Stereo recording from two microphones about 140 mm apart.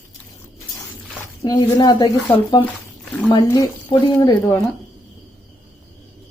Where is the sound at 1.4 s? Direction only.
25° left (ahead or behind).